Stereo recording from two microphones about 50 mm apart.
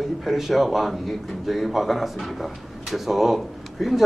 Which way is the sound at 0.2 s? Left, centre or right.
Centre.